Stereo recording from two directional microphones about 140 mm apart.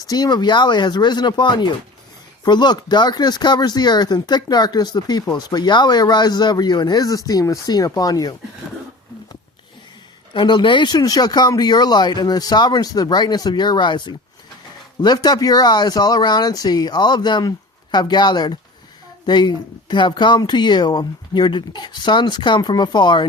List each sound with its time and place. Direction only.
0.0 s speech: 30° left (ahead or behind)
10.3 s speech: 35° left (ahead or behind)